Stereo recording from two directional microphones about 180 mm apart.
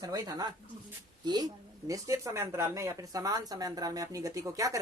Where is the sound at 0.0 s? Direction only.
20° right (ahead or behind).